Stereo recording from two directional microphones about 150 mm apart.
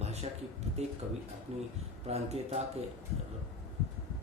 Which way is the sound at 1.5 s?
45° right (ahead or behind).